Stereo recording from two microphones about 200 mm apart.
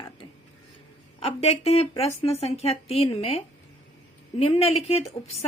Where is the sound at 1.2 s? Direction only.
30° left (ahead or behind).